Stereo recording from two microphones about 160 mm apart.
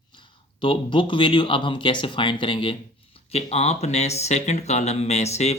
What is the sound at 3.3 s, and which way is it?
Speech, 40° left (ahead or behind).